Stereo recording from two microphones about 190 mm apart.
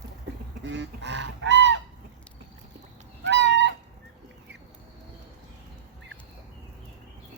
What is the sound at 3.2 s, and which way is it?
Goose, 70° right (ahead or behind).